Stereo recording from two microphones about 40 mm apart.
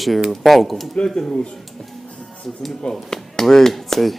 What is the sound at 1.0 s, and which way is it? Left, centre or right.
Speech, centre.